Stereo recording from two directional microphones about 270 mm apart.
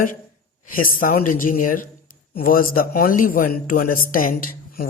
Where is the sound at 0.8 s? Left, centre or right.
Left.